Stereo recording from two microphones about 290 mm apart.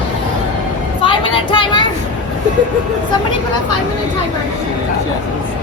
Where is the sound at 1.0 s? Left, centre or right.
Centre.